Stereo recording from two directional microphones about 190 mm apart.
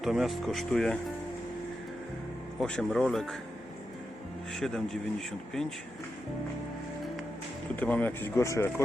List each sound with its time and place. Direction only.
0.0 s speech: centre (ahead or behind)
2.6 s speech: centre (ahead or behind)
4.5 s speech: centre (ahead or behind)
7.8 s speech: 10° left (ahead or behind)